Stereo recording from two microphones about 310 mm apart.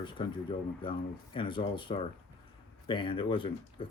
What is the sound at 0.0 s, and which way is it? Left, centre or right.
Speech, centre.